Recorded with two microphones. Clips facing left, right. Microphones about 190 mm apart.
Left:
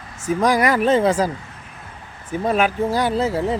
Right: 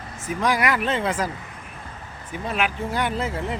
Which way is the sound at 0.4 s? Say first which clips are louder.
Left 5 dB; 40° left (ahead or behind).